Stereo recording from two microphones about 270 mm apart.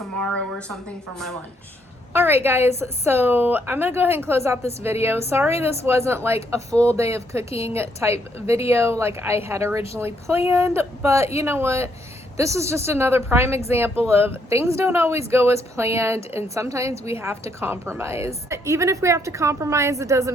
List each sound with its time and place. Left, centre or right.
0.2 s a sound: centre
2.1 s speech: centre
7.5 s a woman's voice: left
7.8 s speech: centre